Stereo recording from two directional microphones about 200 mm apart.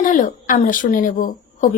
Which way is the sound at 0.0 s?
40° left (ahead or behind).